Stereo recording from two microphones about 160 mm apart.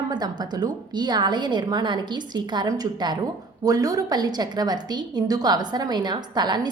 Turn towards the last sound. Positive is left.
turn(degrees=-25)  # may be behind; listen again after turning